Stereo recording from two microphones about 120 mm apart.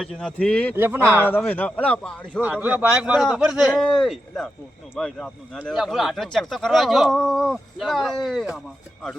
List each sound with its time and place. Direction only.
0.0 s a man's voice: 5° left (ahead or behind)
0.8 s speech: 20° right (ahead or behind)
1.4 s a man's voice: 10° left (ahead or behind)
2.4 s a man's voice: 15° right (ahead or behind); by 8.5 s centre (ahead or behind)